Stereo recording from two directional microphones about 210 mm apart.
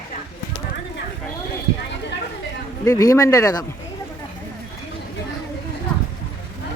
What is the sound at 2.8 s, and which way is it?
Speech, 15° left (ahead or behind).